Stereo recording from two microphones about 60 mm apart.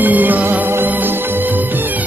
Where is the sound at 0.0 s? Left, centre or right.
Right.